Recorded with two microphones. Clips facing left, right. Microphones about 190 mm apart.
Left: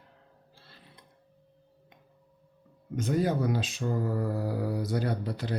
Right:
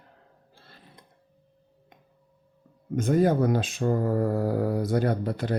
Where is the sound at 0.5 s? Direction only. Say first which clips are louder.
Right 4 dB; 50° right (ahead or behind).